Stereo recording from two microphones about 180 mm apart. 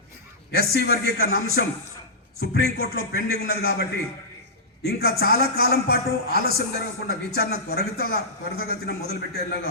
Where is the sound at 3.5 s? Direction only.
60° left (ahead or behind).